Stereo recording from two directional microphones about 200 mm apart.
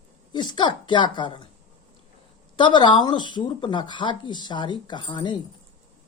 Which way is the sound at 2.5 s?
25° left (ahead or behind).